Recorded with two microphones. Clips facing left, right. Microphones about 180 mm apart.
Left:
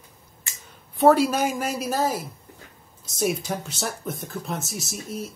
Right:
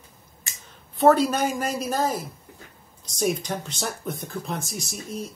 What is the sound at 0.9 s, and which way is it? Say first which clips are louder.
Speech: left 1 dB; 10° left (ahead or behind).